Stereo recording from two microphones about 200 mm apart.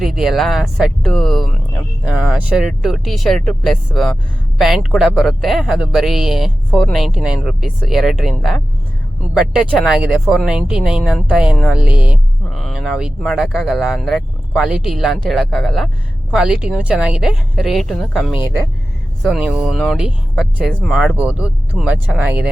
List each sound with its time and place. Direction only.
0.0 s speech: centre (ahead or behind)